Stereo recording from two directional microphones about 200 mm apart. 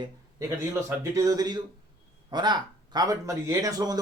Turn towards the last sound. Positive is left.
turn(degrees=-20)  # may be behind; listen again after turning